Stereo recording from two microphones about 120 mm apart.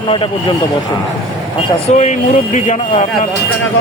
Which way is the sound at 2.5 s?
90° left.